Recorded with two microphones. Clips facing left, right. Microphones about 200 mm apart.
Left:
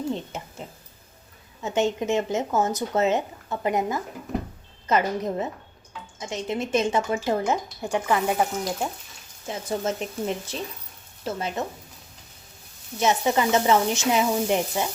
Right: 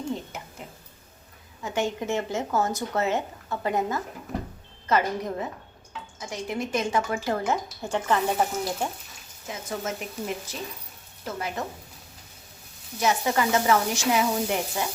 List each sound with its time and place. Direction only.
0.3 s speech: 25° left (ahead or behind)
1.6 s speech: 20° left (ahead or behind)
9.5 s speech: 30° left (ahead or behind)
13.0 s speech: 20° left (ahead or behind)